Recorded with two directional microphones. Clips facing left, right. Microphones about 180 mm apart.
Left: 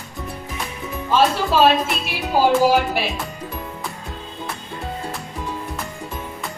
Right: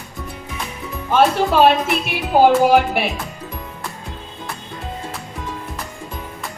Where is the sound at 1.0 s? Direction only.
55° right (ahead or behind).